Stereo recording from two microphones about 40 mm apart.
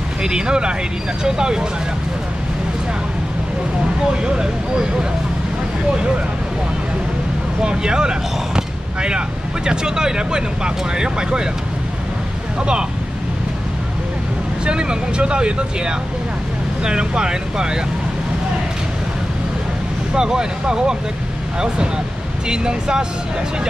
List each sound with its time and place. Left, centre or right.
0.2 s speech: centre
4.2 s speech: centre
7.6 s speech: right
12.5 s speech: right
14.6 s speech: right
20.2 s speech: centre
22.5 s speech: right